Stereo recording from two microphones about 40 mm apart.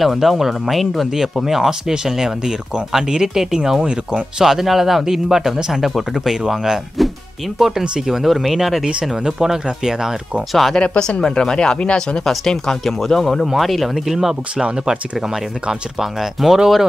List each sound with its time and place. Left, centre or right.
0.0 s speech: centre
9.1 s speech: centre
10.5 s speech: centre
10.8 s speech: left
12.3 s speech: centre
16.0 s speech: centre